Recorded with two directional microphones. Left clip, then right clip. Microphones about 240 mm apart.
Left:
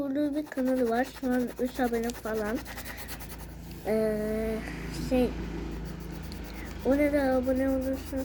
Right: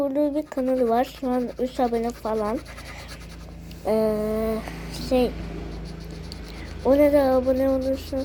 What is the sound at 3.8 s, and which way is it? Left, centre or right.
Speech, centre.